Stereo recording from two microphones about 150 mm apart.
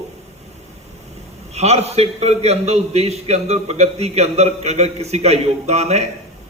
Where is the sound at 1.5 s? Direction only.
45° right (ahead or behind).